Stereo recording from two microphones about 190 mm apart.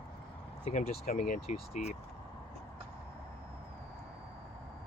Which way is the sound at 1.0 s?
45° left (ahead or behind).